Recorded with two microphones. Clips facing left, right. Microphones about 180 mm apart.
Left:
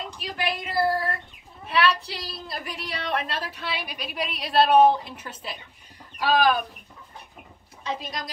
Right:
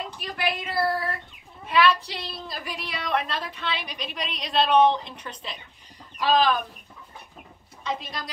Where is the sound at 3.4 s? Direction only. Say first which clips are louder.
Right 1 dB; 5° left (ahead or behind).